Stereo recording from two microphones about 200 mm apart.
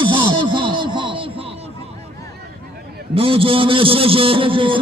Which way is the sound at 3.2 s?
25° right (ahead or behind).